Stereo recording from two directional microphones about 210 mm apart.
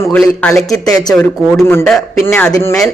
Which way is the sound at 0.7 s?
15° left (ahead or behind).